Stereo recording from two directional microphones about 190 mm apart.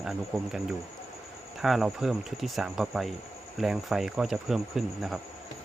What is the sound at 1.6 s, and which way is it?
Speech, centre (ahead or behind).